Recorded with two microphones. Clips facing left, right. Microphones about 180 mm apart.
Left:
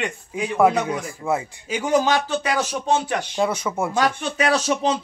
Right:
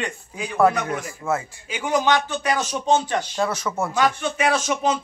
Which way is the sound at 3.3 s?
10° left (ahead or behind).